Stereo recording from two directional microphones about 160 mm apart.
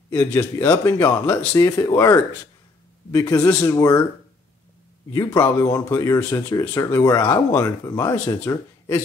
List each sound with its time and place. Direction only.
0.1 s speech: 15° left (ahead or behind)
5.1 s speech: 20° left (ahead or behind)